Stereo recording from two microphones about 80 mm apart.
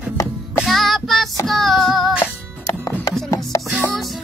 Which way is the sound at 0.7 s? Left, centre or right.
Centre.